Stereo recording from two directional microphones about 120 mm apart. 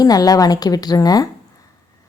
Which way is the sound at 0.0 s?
30° left (ahead or behind).